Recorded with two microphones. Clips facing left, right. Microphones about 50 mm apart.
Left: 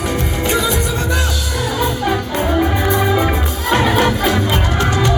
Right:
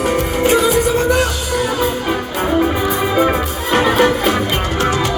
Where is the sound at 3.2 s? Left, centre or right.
Centre.